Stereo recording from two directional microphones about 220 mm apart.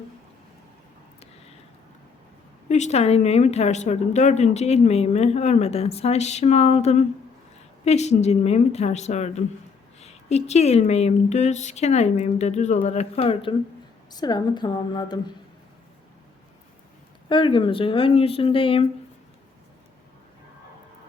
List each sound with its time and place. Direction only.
2.6 s speech: 30° left (ahead or behind)
17.2 s speech: 20° left (ahead or behind)